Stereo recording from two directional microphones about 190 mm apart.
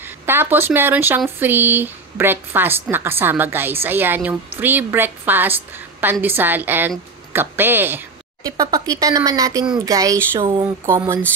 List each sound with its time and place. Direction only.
0.3 s a woman's voice: 10° right (ahead or behind)